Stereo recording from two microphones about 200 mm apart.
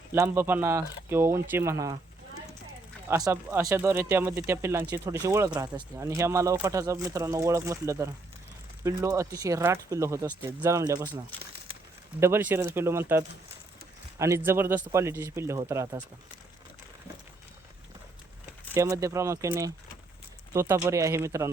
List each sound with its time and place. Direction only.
0.1 s speech: 10° right (ahead or behind)
3.1 s speech: 15° right (ahead or behind)
12.2 s speech: 10° right (ahead or behind)
18.7 s speech: 15° right (ahead or behind)